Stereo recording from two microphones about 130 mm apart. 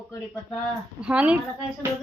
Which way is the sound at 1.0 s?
10° right (ahead or behind).